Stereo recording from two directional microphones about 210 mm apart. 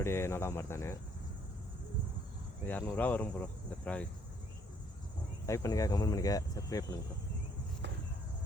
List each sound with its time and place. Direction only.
0.0 s speech: 10° left (ahead or behind)
2.6 s speech: 10° left (ahead or behind)
5.5 s speech: 15° left (ahead or behind)